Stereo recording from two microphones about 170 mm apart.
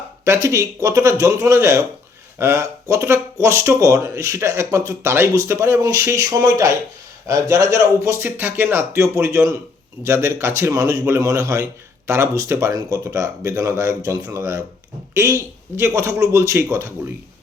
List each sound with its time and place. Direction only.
0.3 s a man's voice: 15° right (ahead or behind)